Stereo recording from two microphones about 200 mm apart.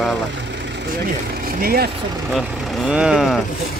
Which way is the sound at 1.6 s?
50° right (ahead or behind).